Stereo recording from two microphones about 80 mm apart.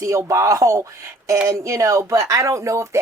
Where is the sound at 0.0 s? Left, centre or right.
Right.